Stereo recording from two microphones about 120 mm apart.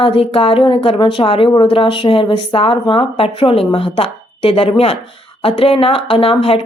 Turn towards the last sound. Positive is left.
turn(degrees=50)  # may be behind; listen again after turning